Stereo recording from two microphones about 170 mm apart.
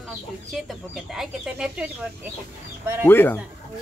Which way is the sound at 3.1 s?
10° left (ahead or behind).